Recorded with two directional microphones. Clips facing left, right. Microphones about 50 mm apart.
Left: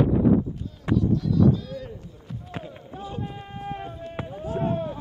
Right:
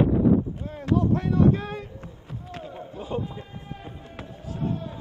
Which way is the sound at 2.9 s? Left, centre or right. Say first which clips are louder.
Right 4 dB; right.